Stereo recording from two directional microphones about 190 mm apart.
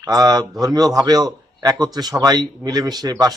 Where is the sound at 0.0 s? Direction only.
20° right (ahead or behind).